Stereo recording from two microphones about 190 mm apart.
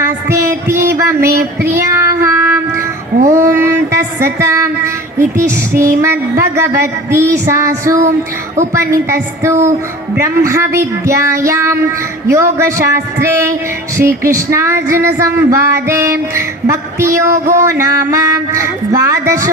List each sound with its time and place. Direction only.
0.3 s music: 15° right (ahead or behind)
0.9 s female singing: 15° right (ahead or behind)
1.6 s child singing: 15° right (ahead or behind)
3.2 s speech: 15° right (ahead or behind)
7.1 s female singing: 15° right (ahead or behind)